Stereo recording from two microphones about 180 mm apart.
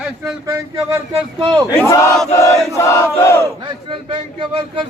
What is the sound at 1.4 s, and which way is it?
Speech, 20° right (ahead or behind).